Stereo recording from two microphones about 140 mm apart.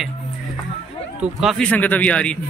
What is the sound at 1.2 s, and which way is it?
Speech, centre (ahead or behind).